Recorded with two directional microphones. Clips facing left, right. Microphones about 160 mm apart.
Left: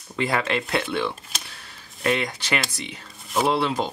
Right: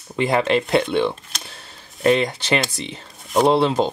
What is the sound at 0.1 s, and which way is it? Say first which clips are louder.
Speech: right 6 dB; 25° right (ahead or behind).